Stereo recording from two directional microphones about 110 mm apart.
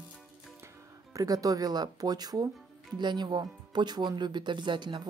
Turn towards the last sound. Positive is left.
turn(degrees=-45)  # may be behind; listen again after turning